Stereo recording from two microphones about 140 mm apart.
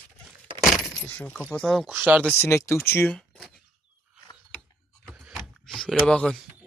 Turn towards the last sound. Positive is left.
turn(degrees=5)  # may be behind; listen again after turning